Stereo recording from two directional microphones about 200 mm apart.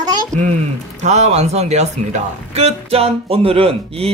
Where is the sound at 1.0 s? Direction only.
35° right (ahead or behind).